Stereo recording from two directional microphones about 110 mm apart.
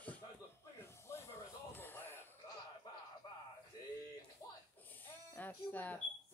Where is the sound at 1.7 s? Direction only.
20° left (ahead or behind).